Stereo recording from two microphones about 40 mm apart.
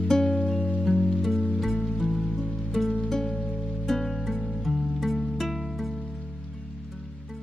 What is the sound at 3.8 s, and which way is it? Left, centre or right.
Music, centre.